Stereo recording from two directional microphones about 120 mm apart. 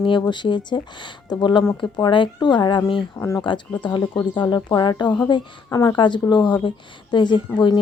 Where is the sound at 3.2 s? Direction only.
30° left (ahead or behind).